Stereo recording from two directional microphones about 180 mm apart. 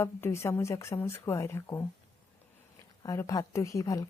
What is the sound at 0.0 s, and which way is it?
A woman's voice, 15° left (ahead or behind).